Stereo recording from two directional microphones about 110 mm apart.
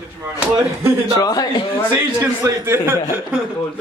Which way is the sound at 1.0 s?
35° left (ahead or behind).